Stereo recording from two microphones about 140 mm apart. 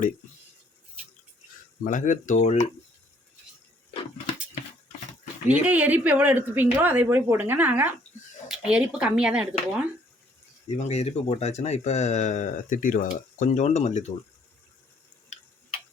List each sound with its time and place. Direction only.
1.8 s speech: 70° left (ahead or behind)
5.6 s speech: 10° right (ahead or behind)
10.7 s speech: 50° left (ahead or behind)